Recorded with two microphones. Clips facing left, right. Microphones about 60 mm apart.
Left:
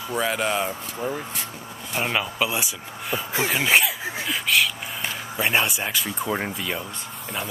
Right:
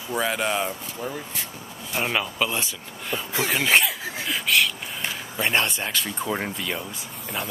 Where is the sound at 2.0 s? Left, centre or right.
Centre.